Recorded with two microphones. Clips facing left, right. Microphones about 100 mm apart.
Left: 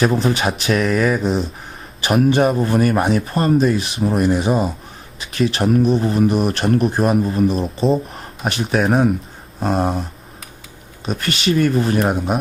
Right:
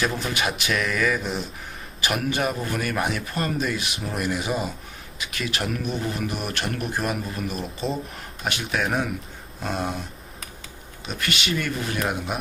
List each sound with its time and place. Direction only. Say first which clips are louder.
0.0 s speech: left 8 dB; 35° left (ahead or behind)
11.0 s speech: left 8 dB; 40° left (ahead or behind)